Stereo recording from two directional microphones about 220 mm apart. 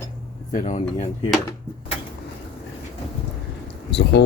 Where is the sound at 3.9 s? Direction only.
50° left (ahead or behind).